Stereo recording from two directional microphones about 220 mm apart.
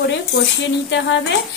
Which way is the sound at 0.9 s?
55° left (ahead or behind).